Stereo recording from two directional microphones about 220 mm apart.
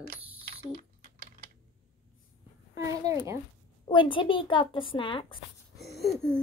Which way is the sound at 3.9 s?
20° left (ahead or behind).